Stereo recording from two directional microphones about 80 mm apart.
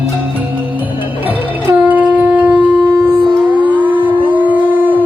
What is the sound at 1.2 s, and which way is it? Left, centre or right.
Shofar, right.